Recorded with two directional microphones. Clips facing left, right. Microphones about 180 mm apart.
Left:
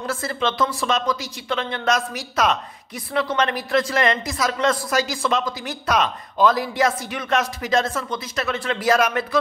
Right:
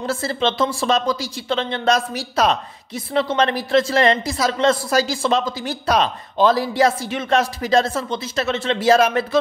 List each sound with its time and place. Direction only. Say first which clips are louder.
0.0 s a man's voice: right 3 dB; 30° right (ahead or behind)